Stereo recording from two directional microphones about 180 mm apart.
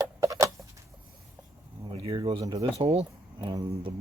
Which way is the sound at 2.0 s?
25° right (ahead or behind).